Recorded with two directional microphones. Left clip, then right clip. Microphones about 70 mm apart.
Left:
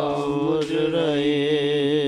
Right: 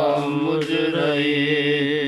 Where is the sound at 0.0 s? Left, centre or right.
Left.